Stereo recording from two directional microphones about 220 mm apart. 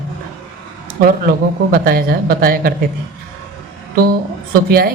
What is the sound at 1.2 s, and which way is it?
Speech, 40° right (ahead or behind).